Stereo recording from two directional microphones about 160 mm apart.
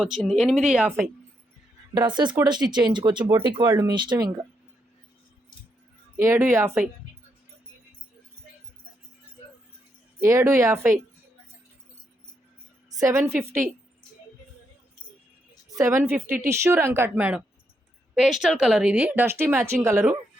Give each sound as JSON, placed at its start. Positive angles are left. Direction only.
{"t": 0.0, "sound": "speech", "side_deg": 0}
{"t": 2.0, "sound": "speech", "side_deg": -30}
{"t": 6.2, "sound": "speech", "side_deg": -15}
{"t": 10.2, "sound": "speech", "side_deg": -20}
{"t": 13.0, "sound": "speech", "side_deg": -20}
{"t": 15.7, "sound": "speech", "side_deg": -20}